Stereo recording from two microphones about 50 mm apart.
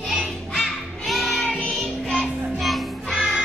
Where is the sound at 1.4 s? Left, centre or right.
Centre.